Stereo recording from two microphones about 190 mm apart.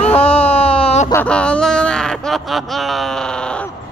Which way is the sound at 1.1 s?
5° left (ahead or behind).